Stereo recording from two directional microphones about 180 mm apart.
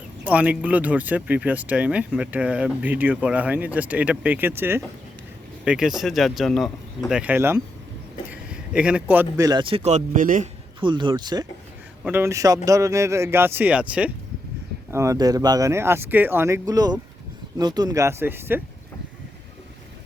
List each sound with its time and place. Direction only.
0.3 s speech: 10° right (ahead or behind); by 10.5 s 45° right (ahead or behind)
10.8 s speech: 25° right (ahead or behind)
12.0 s speech: 10° right (ahead or behind)